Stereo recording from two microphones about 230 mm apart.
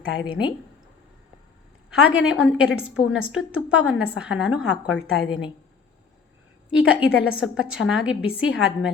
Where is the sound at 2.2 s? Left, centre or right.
Centre.